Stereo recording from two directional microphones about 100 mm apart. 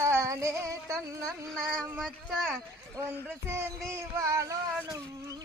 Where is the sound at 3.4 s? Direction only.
25° right (ahead or behind).